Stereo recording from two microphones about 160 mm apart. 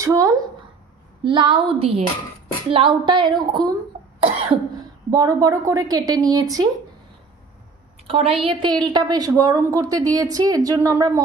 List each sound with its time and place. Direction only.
0.0 s a woman's voice: 20° right (ahead or behind)
1.2 s a woman's voice: 30° right (ahead or behind)
4.2 s cough: 35° right (ahead or behind)
5.1 s a woman's voice: 20° right (ahead or behind)
8.1 s a woman's voice: 40° right (ahead or behind); by 11.1 s 20° right (ahead or behind)